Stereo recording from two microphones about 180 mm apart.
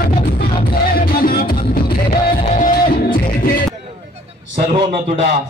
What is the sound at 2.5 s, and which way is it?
Music, 50° left (ahead or behind).